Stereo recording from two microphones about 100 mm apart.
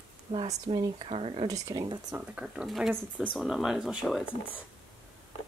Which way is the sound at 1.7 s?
50° right (ahead or behind).